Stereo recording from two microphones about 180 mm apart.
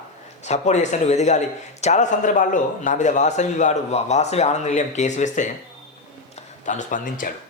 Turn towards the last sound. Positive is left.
turn(degrees=50)  # may be behind; listen again after turning